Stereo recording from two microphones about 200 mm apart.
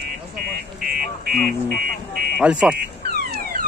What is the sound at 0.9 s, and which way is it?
Vehicle, 45° right (ahead or behind).